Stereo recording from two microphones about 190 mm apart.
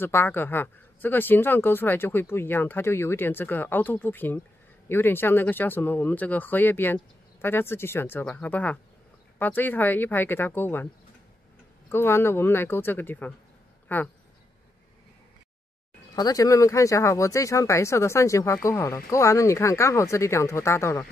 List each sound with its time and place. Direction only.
0.0 s speech: 10° left (ahead or behind)
11.9 s speech: 10° left (ahead or behind)
16.2 s speech: 20° left (ahead or behind)